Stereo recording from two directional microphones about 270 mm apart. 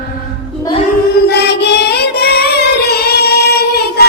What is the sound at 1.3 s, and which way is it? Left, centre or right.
Music, left.